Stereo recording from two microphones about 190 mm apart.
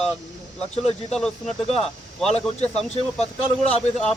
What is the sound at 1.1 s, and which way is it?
A man's voice, 5° left (ahead or behind).